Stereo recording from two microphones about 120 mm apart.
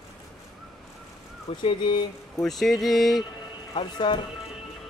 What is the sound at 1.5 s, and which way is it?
Speech, 50° left (ahead or behind).